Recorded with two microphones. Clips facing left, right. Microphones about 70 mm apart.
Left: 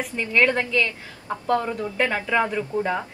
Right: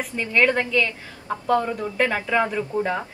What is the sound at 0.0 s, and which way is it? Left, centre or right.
A woman's voice, centre.